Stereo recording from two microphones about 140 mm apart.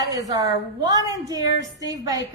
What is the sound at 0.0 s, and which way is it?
A woman's voice, 25° right (ahead or behind).